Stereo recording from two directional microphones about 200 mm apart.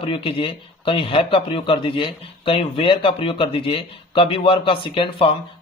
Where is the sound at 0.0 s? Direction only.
25° left (ahead or behind).